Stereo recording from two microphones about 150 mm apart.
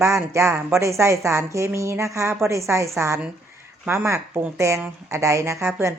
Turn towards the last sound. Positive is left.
turn(degrees=-20)  # may be behind; listen again after turning